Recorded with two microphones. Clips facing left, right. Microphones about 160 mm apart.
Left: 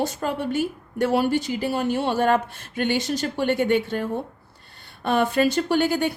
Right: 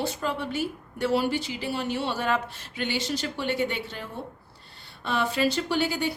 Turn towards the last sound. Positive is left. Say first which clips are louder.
# left 5 dB
turn(degrees=50)  # may be behind; listen again after turning